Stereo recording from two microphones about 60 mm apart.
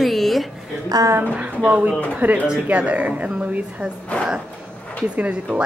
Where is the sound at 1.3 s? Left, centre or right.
Right.